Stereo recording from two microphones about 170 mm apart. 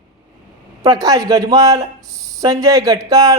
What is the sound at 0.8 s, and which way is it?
Speech, 20° right (ahead or behind).